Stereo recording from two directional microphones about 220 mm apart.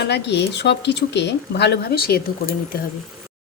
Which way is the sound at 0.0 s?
50° left (ahead or behind).